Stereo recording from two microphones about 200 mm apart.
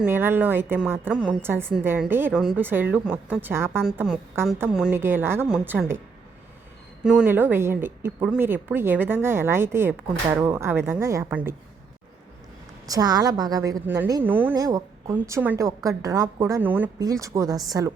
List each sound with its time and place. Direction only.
0.0 s a woman's voice: 10° right (ahead or behind)
7.0 s a woman's voice: 5° right (ahead or behind)
12.9 s a woman's voice: 20° right (ahead or behind)